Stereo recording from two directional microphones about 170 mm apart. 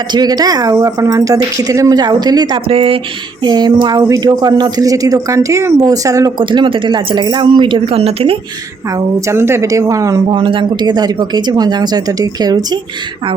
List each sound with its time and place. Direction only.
0.1 s speech: 25° right (ahead or behind)
9.2 s a woman's voice: 15° right (ahead or behind)
10.3 s speech: 30° right (ahead or behind)